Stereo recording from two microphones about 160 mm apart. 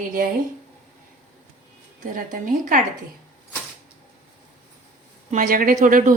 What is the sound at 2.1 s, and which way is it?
Speech, 55° right (ahead or behind).